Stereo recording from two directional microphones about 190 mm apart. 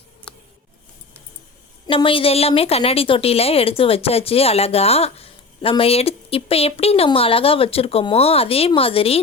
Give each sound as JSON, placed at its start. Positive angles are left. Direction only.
{"t": 1.9, "sound": "a woman's voice", "side_deg": 30}